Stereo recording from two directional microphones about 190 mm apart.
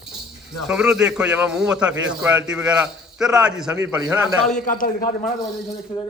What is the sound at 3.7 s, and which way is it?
Speech, 20° right (ahead or behind).